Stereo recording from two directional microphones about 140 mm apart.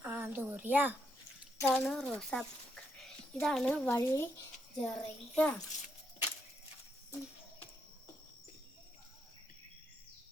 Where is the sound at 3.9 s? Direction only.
20° left (ahead or behind).